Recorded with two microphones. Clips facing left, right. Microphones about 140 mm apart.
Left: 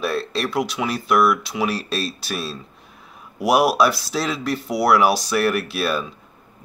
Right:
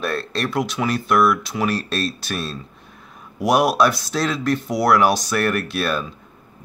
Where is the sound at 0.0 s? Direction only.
5° left (ahead or behind).